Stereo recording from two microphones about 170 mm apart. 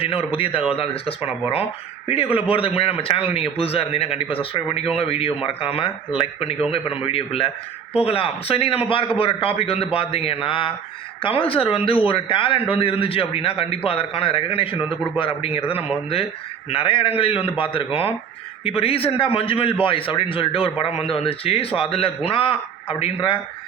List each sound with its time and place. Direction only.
0.0 s a man's voice: 30° left (ahead or behind)
16.6 s a man's voice: 30° left (ahead or behind)